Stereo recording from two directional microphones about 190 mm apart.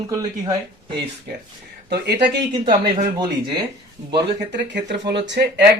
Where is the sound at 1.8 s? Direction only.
60° right (ahead or behind).